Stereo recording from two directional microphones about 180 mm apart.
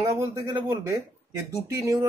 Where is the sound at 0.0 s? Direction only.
20° right (ahead or behind).